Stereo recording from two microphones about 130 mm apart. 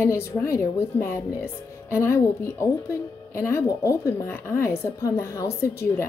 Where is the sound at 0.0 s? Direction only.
20° left (ahead or behind).